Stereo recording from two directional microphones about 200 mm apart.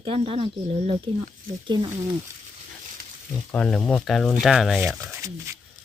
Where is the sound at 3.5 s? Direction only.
5° left (ahead or behind).